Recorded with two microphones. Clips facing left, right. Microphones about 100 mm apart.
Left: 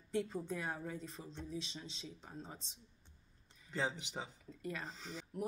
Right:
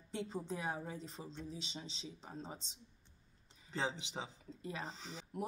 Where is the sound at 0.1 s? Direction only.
25° right (ahead or behind).